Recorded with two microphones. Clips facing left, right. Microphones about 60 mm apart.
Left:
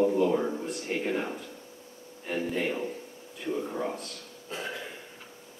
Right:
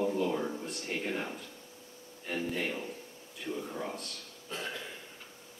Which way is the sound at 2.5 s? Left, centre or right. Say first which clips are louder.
Left 5 dB; centre.